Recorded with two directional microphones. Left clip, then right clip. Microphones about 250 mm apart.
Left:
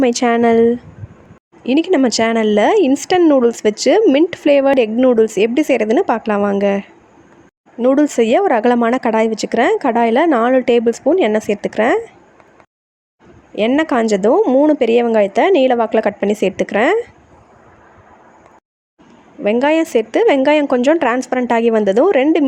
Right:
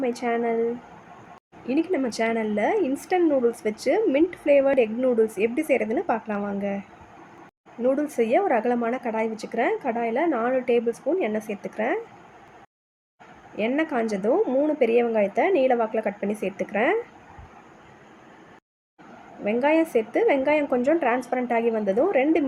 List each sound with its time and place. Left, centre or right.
0.0 s speech: left
1.6 s speech: left
13.6 s speech: left
19.5 s speech: left